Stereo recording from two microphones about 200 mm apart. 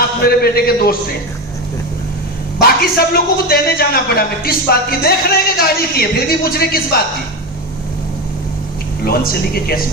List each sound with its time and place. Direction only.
0.3 s a man's voice: 50° left (ahead or behind)
2.6 s a man's voice: 50° left (ahead or behind)
9.0 s a man's voice: 50° left (ahead or behind)